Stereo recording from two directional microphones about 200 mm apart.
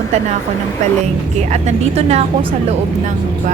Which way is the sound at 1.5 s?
35° right (ahead or behind).